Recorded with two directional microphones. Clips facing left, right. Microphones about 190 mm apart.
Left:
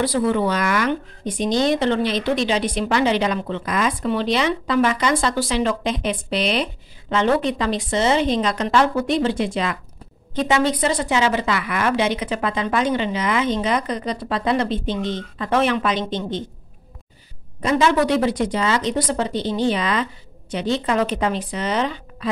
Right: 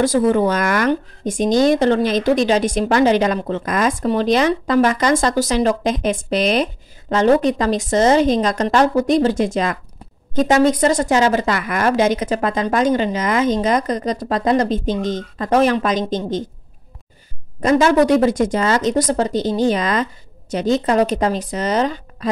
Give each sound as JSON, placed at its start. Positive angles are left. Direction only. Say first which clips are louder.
{"t": 0.0, "sound": "speech", "louder": "right 4 dB", "side_deg": -45}
{"t": 17.6, "sound": "speech", "louder": "right 4 dB", "side_deg": -45}